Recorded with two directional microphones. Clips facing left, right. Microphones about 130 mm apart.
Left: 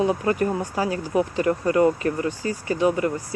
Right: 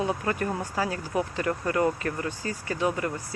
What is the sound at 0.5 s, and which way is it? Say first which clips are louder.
Speech: left 4 dB; 20° left (ahead or behind).